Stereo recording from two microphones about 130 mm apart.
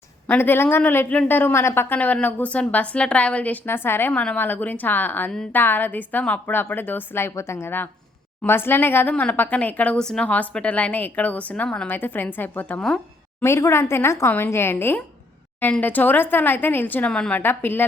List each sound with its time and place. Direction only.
0.3 s a woman's voice: 15° left (ahead or behind)
13.4 s a woman's voice: 20° left (ahead or behind)